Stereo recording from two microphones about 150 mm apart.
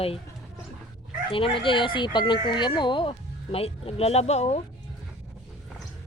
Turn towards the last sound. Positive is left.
turn(degrees=45)  # may be behind; listen again after turning